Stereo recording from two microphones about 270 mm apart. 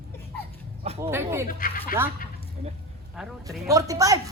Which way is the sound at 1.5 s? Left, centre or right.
Left.